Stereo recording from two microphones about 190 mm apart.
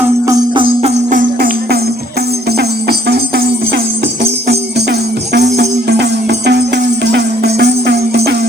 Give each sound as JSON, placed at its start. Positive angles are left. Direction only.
{"t": 0.3, "sound": "music", "side_deg": -25}
{"t": 4.2, "sound": "music", "side_deg": -60}